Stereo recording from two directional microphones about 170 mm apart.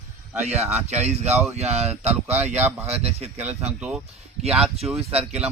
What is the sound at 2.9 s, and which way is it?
Speech, 35° right (ahead or behind).